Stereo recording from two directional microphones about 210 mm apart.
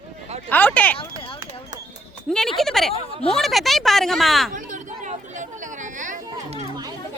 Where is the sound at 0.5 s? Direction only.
10° left (ahead or behind).